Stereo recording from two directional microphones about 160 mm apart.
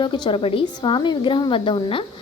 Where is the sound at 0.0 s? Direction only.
30° left (ahead or behind).